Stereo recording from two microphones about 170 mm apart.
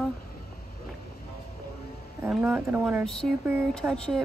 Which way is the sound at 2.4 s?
10° right (ahead or behind).